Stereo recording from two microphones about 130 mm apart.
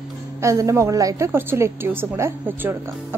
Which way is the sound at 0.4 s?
25° right (ahead or behind).